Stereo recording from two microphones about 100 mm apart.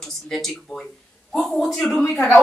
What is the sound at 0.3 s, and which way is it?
A woman's voice, 5° left (ahead or behind).